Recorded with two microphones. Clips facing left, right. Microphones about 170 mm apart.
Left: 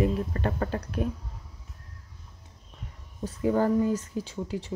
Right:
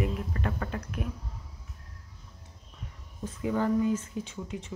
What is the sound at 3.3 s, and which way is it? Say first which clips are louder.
Speech: left 4 dB; 40° left (ahead or behind).